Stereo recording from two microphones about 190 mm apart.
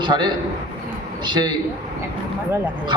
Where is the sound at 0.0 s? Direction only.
25° right (ahead or behind).